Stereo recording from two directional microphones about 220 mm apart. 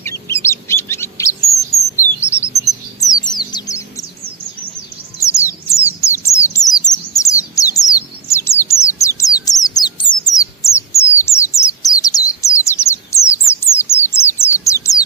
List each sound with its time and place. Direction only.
0.0 s bird: 10° left (ahead or behind)
2.2 s chirp: 10° left (ahead or behind)
3.0 s bird: 15° left (ahead or behind)
5.2 s a sound: 15° left (ahead or behind)
6.0 s bird: 15° left (ahead or behind)